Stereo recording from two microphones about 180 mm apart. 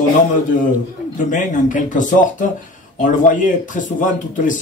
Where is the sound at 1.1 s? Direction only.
45° left (ahead or behind).